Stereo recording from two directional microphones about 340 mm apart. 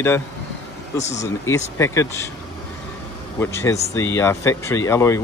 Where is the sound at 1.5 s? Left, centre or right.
Centre.